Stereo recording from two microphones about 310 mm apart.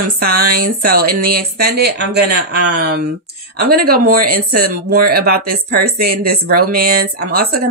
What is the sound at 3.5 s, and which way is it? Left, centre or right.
A woman's voice, right.